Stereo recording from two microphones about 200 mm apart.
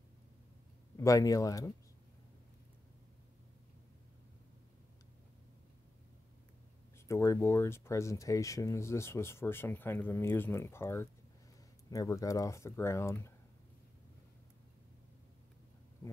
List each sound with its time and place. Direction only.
0.9 s speech: 15° left (ahead or behind)
7.1 s speech: 15° left (ahead or behind)